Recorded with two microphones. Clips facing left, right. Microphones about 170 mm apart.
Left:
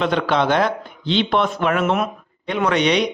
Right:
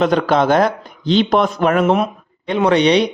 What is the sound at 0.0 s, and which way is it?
Speech, 40° right (ahead or behind).